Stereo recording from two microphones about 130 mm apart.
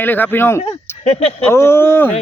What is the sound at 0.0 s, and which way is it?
Speech, 15° left (ahead or behind).